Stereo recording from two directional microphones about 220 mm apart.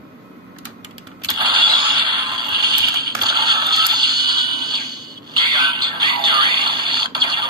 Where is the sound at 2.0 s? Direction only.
20° right (ahead or behind).